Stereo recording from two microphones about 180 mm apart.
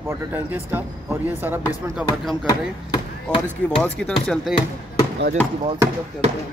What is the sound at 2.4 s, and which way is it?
Speech, 20° left (ahead or behind).